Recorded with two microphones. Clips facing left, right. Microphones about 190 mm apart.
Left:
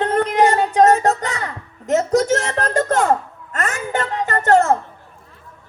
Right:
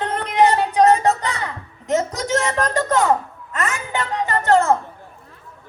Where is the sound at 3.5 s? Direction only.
45° left (ahead or behind).